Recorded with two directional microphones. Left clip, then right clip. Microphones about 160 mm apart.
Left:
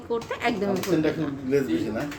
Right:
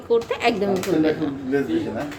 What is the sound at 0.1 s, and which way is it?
Speech, 10° right (ahead or behind).